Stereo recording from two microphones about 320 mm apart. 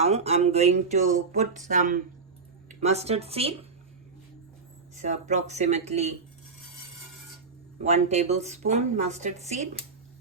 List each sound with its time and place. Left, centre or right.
0.0 s speech: centre
4.9 s speech: right
7.8 s speech: centre